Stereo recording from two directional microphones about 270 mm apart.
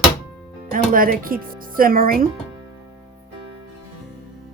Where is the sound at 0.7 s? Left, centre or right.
Right.